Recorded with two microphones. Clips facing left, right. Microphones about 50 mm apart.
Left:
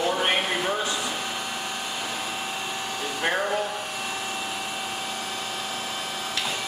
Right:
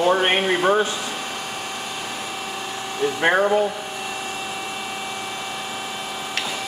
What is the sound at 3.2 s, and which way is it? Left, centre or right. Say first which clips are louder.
Speech: right 7 dB; right.